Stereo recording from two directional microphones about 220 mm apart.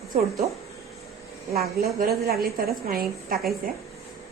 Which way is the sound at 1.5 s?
45° right (ahead or behind).